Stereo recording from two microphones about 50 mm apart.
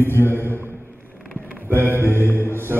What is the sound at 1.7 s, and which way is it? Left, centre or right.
Mantra, right.